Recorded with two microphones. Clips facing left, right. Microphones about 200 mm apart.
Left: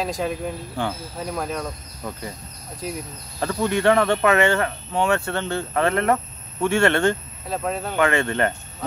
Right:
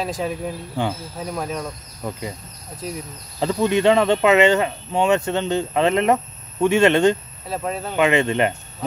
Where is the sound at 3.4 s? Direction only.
20° right (ahead or behind).